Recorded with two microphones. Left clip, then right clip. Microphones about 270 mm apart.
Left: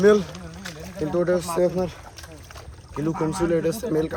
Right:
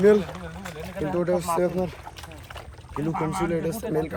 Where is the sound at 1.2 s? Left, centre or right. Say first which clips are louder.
Left 2 dB; centre.